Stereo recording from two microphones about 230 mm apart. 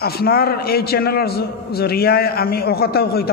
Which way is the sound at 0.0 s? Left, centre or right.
Left.